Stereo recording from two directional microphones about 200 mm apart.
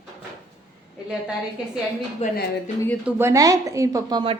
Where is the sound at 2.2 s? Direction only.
35° left (ahead or behind).